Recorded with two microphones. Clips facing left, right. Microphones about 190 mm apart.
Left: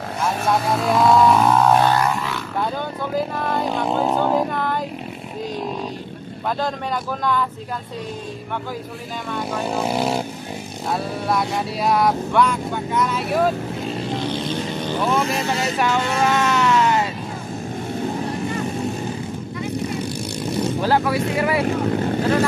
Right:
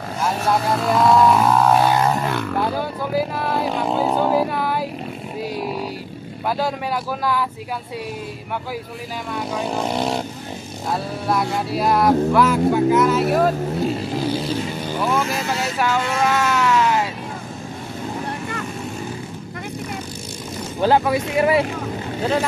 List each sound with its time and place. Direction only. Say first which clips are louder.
0.2 s speech: even; centre (ahead or behind)
2.1 s roaring cats: right 4 dB; 50° right (ahead or behind)
2.6 s vehicle: right 2 dB; 5° right (ahead or behind)
9.3 s a sound: even; centre (ahead or behind)
15.0 s speech: even; 5° right (ahead or behind)
20.9 s speech: right 3 dB; 20° right (ahead or behind)